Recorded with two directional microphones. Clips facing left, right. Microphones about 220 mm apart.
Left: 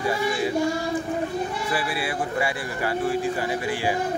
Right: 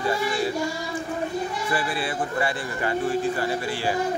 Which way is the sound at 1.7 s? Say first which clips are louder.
Even; 5° left (ahead or behind).